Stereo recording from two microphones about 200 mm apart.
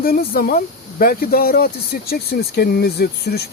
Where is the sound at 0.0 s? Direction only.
50° left (ahead or behind).